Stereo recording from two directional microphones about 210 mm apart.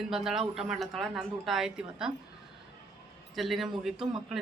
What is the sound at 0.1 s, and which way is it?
Speech, centre (ahead or behind).